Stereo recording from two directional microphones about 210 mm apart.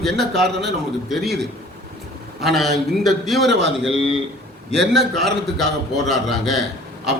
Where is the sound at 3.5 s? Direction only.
55° right (ahead or behind).